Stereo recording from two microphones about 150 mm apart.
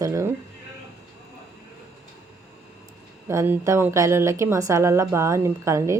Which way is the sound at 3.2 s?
15° right (ahead or behind).